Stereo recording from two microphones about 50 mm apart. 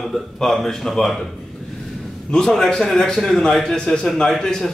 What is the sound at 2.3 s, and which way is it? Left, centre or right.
A man's voice, centre.